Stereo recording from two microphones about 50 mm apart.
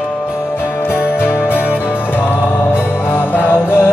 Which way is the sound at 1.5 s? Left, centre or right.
Left.